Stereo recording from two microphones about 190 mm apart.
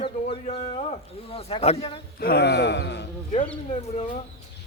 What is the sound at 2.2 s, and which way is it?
Speech, 60° left (ahead or behind).